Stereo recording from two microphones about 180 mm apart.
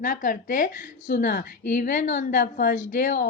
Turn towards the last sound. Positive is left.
turn(degrees=55)  # may be behind; listen again after turning